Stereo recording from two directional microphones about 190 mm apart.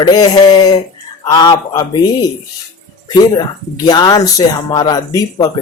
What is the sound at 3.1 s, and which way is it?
Speech, 20° left (ahead or behind).